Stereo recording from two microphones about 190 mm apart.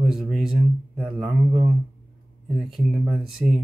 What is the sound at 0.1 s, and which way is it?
Speech, centre (ahead or behind).